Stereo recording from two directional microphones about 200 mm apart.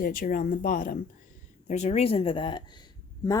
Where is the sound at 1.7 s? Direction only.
35° left (ahead or behind).